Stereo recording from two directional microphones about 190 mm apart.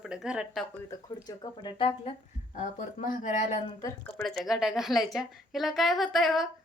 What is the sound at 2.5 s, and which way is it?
Speech, 40° left (ahead or behind).